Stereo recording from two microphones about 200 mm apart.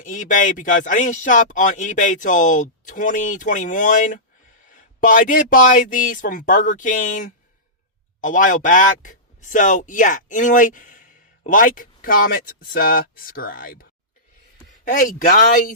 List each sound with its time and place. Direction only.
0.0 s speech: 40° left (ahead or behind)
14.8 s speech: 40° left (ahead or behind)